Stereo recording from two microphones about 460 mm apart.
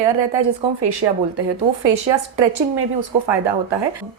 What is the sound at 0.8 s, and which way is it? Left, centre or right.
Speech, right.